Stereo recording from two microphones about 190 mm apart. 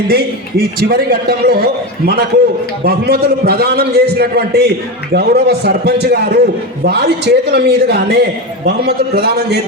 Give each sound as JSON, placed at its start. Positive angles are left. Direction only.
{"t": 0.1, "sound": "a man's voice", "side_deg": -55}